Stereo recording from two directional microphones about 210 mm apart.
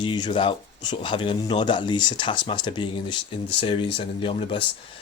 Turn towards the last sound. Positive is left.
turn(degrees=25)  # may be behind; listen again after turning